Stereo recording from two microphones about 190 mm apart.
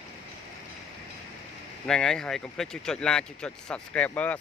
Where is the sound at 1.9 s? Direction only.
5° left (ahead or behind).